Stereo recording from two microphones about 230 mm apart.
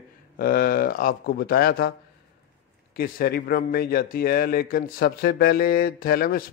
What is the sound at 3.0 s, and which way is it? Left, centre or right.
Speech, left.